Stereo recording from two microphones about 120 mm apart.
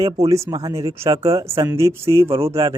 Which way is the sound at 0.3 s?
25° right (ahead or behind).